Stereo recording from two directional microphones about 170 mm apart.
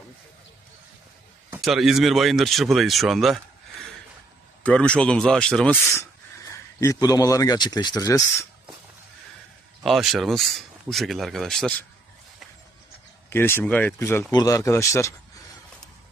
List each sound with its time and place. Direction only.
1.6 s speech: centre (ahead or behind)
4.6 s speech: 5° left (ahead or behind)
6.5 s speech: 20° left (ahead or behind)
9.8 s speech: centre (ahead or behind)
13.3 s speech: 15° left (ahead or behind)